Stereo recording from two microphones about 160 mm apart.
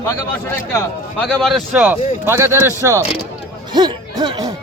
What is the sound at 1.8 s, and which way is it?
A man's voice, 15° right (ahead or behind).